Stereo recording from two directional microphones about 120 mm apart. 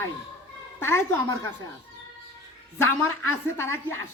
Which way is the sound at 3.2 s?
20° left (ahead or behind).